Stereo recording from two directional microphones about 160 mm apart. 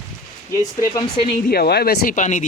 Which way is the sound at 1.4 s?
75° left (ahead or behind).